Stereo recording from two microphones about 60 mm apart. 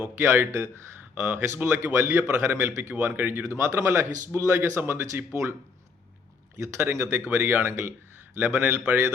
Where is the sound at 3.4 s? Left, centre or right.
Right.